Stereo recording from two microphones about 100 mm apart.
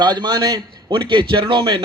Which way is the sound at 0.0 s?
50° right (ahead or behind).